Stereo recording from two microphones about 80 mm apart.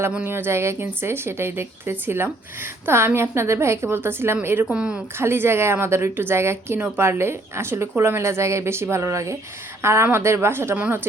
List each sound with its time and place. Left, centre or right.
0.3 s speech: right
4.7 s a woman's voice: centre
5.1 s a woman's voice: right